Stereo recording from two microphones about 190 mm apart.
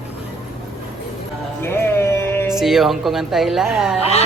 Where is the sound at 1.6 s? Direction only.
10° left (ahead or behind).